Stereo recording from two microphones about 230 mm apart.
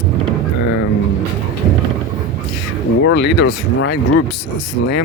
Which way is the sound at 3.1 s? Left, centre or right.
Left.